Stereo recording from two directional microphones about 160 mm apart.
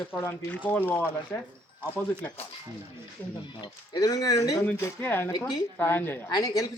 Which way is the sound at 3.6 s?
25° left (ahead or behind).